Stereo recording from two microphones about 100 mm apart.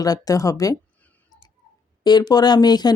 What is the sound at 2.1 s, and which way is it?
Speech, 45° left (ahead or behind).